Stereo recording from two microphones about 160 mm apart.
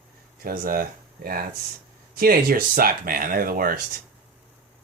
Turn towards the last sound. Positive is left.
turn(degrees=-65)  # may be behind; listen again after turning